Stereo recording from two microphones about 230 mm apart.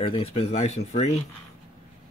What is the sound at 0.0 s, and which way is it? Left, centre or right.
Speech, left.